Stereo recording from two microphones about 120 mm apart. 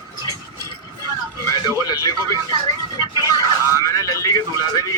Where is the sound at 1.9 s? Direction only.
30° left (ahead or behind).